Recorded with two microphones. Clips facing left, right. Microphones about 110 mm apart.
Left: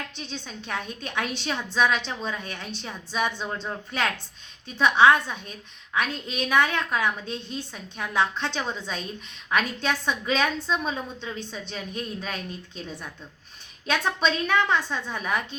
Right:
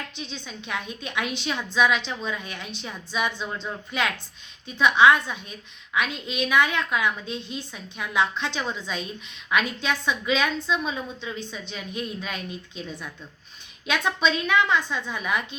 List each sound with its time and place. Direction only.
0.2 s a woman's voice: 40° left (ahead or behind)